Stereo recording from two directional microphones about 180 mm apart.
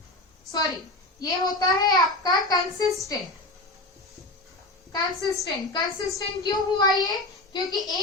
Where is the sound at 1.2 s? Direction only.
20° left (ahead or behind).